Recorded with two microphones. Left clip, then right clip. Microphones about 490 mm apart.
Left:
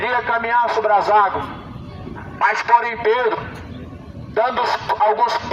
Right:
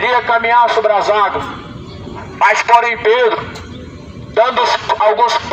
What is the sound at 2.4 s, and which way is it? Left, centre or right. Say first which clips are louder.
Speech: right 6 dB; left.